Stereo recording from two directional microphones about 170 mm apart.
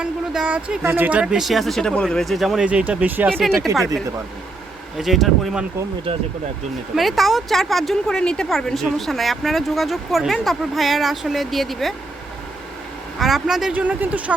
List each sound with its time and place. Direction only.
0.0 s speech: 5° right (ahead or behind)
4.9 s speech: centre (ahead or behind)
6.9 s speech: centre (ahead or behind)
13.1 s speech: centre (ahead or behind)